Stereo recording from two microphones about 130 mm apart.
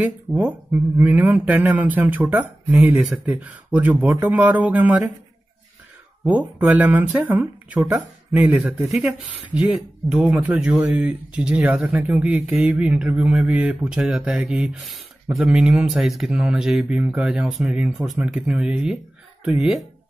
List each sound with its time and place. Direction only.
0.0 s speech: 10° right (ahead or behind)
6.2 s speech: 10° right (ahead or behind)